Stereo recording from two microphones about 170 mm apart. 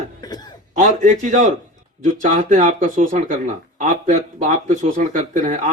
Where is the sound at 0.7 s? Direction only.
45° right (ahead or behind).